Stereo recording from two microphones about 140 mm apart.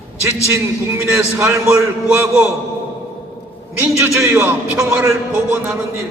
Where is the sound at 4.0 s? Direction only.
20° right (ahead or behind).